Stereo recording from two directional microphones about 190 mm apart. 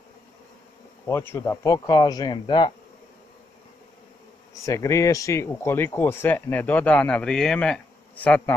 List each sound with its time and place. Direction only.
1.0 s speech: 15° left (ahead or behind)
4.6 s speech: 15° left (ahead or behind)